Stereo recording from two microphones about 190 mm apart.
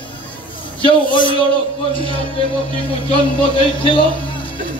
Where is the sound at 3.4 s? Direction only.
25° left (ahead or behind).